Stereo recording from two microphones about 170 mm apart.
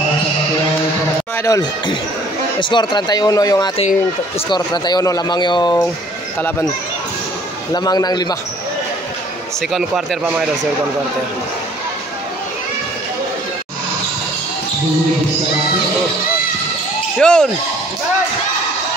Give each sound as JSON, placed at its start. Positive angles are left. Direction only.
{"t": 1.4, "sound": "speech", "side_deg": 20}
{"t": 7.7, "sound": "speech", "side_deg": 25}
{"t": 9.6, "sound": "speech", "side_deg": 0}
{"t": 17.2, "sound": "speech", "side_deg": 5}